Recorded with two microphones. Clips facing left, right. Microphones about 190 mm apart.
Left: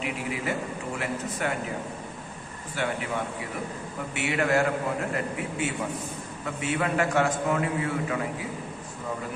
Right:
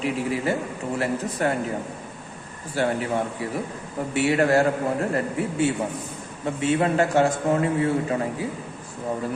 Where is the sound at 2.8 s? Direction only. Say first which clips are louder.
Right 6 dB; 35° right (ahead or behind).